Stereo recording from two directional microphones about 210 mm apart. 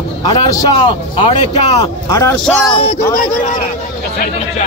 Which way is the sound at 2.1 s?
15° left (ahead or behind).